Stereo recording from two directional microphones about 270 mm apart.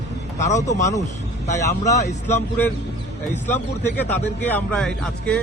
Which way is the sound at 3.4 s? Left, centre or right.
Centre.